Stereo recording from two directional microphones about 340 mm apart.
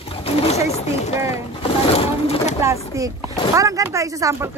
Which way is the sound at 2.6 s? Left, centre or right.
Centre.